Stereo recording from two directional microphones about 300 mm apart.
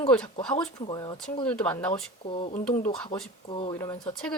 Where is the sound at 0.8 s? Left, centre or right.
Centre.